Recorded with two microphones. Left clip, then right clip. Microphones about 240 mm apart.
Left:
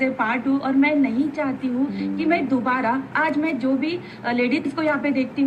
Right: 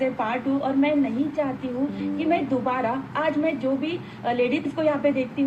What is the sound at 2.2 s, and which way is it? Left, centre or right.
A woman's voice, left.